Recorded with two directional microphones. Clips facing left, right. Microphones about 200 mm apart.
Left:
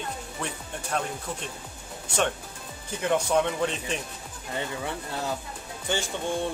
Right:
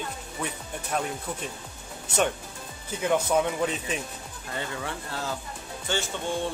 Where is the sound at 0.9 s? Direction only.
5° right (ahead or behind).